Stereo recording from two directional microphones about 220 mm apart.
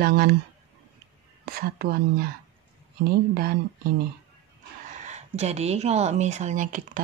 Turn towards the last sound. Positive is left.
turn(degrees=-35)  # may be behind; listen again after turning